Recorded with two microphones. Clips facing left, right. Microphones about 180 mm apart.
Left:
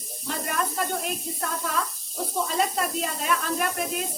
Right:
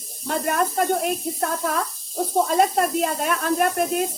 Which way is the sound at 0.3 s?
50° right (ahead or behind).